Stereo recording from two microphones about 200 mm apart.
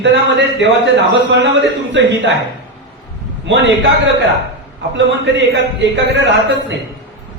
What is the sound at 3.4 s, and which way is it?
Speech, 60° right (ahead or behind).